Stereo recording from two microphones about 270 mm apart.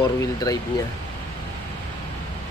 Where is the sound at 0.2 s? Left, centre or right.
Centre.